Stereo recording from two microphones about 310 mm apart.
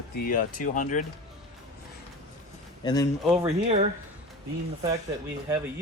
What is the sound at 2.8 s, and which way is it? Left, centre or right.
Speech, centre.